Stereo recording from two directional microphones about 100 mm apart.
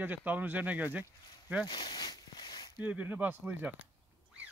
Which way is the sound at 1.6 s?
55° left (ahead or behind).